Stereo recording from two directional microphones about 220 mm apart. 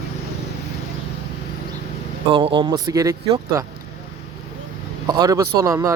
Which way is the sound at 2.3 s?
25° right (ahead or behind).